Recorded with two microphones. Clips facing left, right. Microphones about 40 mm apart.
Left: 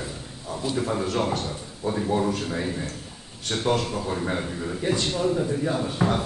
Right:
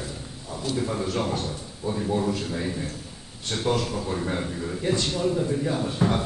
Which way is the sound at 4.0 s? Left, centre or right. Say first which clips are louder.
Left 1 dB; centre.